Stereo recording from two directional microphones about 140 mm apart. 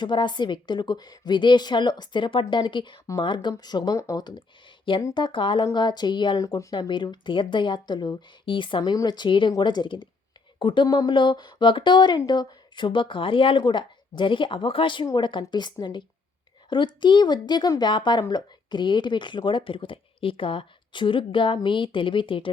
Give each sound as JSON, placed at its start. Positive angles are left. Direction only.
{"t": 0.0, "sound": "a woman's voice", "side_deg": 35}